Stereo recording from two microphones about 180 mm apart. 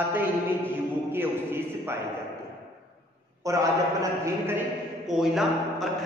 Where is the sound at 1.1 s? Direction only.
10° right (ahead or behind).